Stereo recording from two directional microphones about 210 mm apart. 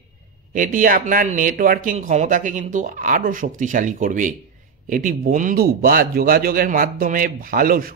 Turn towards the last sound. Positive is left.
turn(degrees=-45)  # may be behind; listen again after turning